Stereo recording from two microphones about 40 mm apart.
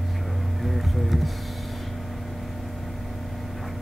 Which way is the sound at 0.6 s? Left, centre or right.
Centre.